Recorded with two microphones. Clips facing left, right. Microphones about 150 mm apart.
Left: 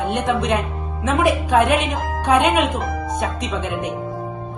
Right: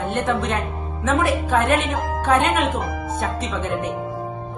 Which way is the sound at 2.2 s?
15° left (ahead or behind).